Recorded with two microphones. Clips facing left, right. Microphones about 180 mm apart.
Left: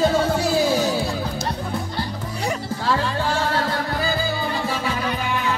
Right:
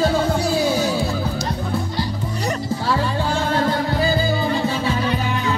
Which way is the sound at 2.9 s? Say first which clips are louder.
Even; 10° right (ahead or behind).